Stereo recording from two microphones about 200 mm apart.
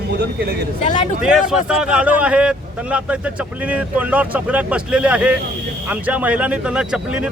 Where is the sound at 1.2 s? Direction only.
5° right (ahead or behind).